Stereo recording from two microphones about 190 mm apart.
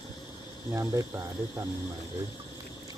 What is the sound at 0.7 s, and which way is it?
Speech, 15° right (ahead or behind).